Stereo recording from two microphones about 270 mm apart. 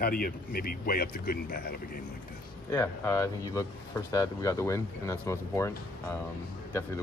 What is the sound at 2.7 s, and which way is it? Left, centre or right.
Speech, centre.